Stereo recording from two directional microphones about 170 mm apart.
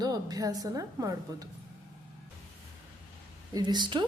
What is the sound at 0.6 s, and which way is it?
Speech, 20° right (ahead or behind).